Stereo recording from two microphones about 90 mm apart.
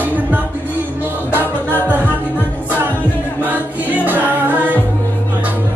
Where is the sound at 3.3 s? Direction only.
20° right (ahead or behind).